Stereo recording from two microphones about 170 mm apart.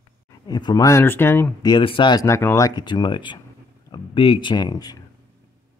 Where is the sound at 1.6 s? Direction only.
30° left (ahead or behind).